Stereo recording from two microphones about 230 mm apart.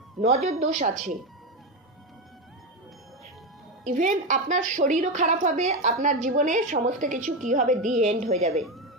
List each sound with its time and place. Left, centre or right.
0.3 s a woman's voice: right
3.8 s a woman's voice: right
7.8 s a woman's voice: centre
8.0 s a woman's voice: right
8.6 s a sound: centre